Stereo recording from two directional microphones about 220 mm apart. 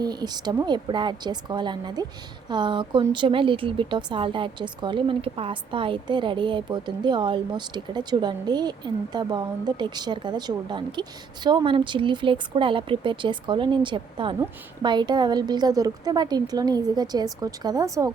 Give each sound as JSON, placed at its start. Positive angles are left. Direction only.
{"t": 0.0, "sound": "speech", "side_deg": -20}